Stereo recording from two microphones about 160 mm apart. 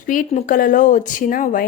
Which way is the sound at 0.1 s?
55° left (ahead or behind).